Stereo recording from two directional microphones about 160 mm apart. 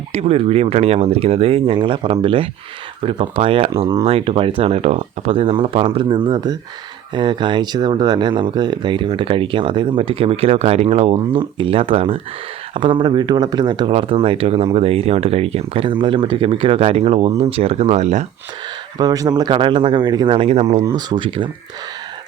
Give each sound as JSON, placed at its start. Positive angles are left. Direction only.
{"t": 0.1, "sound": "speech", "side_deg": -40}
{"t": 18.9, "sound": "speech", "side_deg": -20}
{"t": 20.8, "sound": "speech", "side_deg": -30}